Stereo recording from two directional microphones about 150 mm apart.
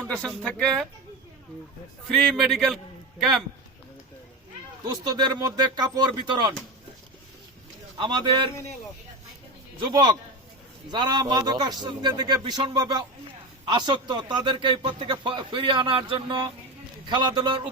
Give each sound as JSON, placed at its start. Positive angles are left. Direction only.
{"t": 0.4, "sound": "speech", "side_deg": 5}
{"t": 2.0, "sound": "a man's voice", "side_deg": 0}
{"t": 4.8, "sound": "speech", "side_deg": -30}
{"t": 7.9, "sound": "a man's voice", "side_deg": -30}
{"t": 9.9, "sound": "a man's voice", "side_deg": -30}